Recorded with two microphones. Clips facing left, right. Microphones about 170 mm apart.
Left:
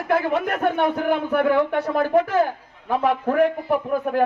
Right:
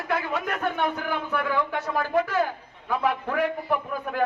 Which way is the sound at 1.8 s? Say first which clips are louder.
Left 6 dB; 30° left (ahead or behind).